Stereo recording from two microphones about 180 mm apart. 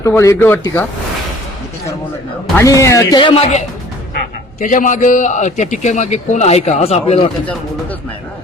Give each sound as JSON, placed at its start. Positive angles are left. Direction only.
{"t": 0.0, "sound": "a man's voice", "side_deg": 15}
{"t": 2.6, "sound": "speech", "side_deg": 15}
{"t": 4.6, "sound": "a man's voice", "side_deg": 45}